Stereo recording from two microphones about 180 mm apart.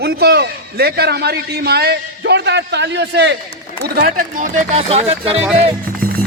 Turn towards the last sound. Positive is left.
turn(degrees=-55)  # may be behind; listen again after turning